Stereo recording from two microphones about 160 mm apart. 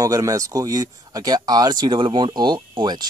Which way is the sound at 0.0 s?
20° right (ahead or behind).